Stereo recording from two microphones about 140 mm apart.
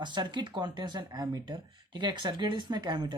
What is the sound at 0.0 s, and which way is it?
Speech, 35° right (ahead or behind).